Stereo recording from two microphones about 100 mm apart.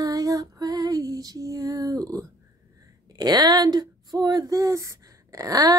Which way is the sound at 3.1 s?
40° right (ahead or behind).